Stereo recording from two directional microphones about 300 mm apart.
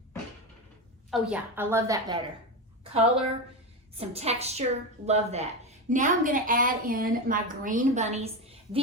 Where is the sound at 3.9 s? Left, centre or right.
Right.